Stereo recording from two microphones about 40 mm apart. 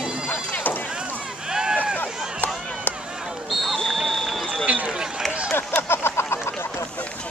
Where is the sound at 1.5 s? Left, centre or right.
Centre.